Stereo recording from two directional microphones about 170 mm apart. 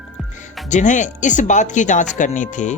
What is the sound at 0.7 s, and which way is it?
Speech, 45° left (ahead or behind).